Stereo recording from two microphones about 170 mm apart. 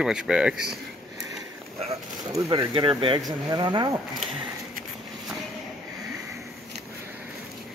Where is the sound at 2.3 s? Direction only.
30° right (ahead or behind).